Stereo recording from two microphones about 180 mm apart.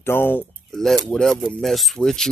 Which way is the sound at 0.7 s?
Centre (ahead or behind).